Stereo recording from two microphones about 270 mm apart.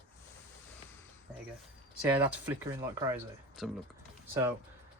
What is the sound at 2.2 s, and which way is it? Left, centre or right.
Speech, centre.